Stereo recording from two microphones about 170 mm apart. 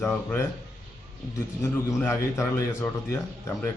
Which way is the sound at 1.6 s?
15° left (ahead or behind).